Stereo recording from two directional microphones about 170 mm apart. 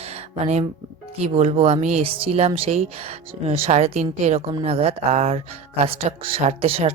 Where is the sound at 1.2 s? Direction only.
35° right (ahead or behind).